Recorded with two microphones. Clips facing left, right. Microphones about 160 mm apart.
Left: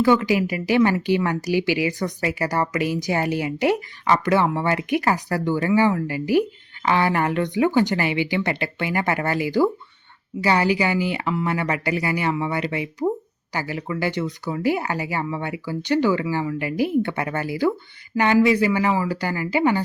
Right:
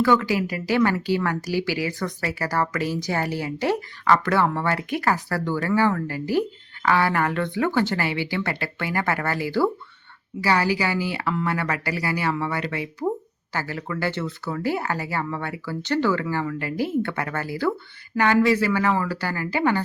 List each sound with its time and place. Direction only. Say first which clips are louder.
0.0 s a woman's voice: left 2 dB; 15° left (ahead or behind)